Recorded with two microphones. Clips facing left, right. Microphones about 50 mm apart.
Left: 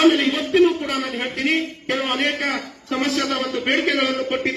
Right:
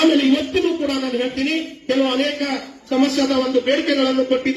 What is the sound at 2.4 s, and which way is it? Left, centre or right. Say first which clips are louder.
A man's voice: right 1 dB; left.